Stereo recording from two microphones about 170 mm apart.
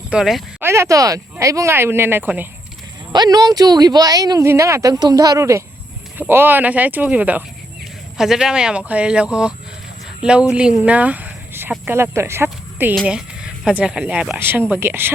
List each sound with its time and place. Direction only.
0.1 s speech: 5° right (ahead or behind)
0.6 s speech: 15° right (ahead or behind)
3.1 s speech: 25° right (ahead or behind)